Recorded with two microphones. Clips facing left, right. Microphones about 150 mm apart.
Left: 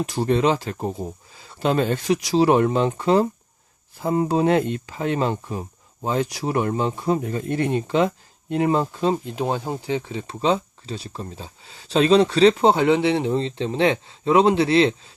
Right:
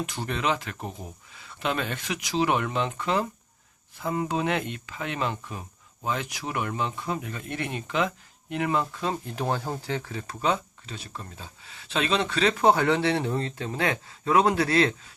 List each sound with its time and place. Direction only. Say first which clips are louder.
0.0 s speech: left 9 dB; 35° left (ahead or behind)
9.1 s speech: left 4 dB; 20° left (ahead or behind)